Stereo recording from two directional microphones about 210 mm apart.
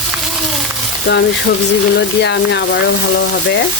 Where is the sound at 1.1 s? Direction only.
55° left (ahead or behind).